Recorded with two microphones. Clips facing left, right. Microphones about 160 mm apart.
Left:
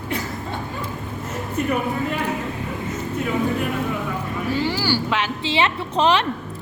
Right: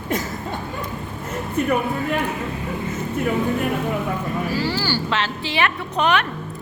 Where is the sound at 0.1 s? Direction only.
45° right (ahead or behind).